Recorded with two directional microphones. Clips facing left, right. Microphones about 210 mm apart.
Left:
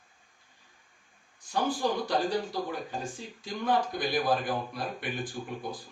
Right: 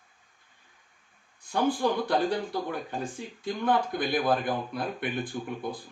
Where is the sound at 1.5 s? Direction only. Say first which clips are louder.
Right 3 dB; 55° right (ahead or behind).